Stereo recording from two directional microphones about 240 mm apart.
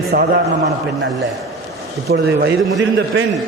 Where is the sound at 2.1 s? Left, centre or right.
Right.